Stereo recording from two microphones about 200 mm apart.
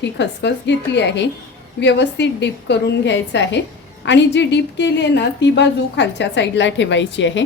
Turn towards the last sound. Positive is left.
turn(degrees=65)  # may be behind; listen again after turning